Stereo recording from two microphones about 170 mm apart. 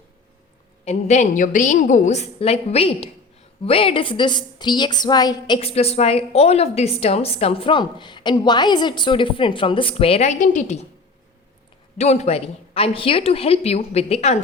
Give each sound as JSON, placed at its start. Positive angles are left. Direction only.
{"t": 0.9, "sound": "a woman's voice", "side_deg": 40}
{"t": 11.9, "sound": "a woman's voice", "side_deg": 40}